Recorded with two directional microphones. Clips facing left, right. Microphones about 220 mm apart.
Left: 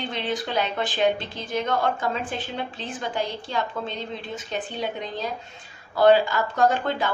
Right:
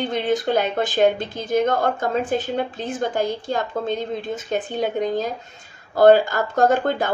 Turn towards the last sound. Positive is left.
turn(degrees=-45)  # may be behind; listen again after turning